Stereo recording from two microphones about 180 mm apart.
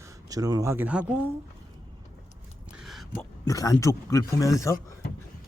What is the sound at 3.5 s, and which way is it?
Speech, 20° left (ahead or behind).